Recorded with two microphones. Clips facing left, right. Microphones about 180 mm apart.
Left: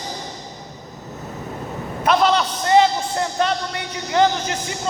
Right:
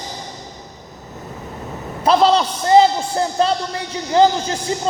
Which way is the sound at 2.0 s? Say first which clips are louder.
Right 3 dB; 30° right (ahead or behind).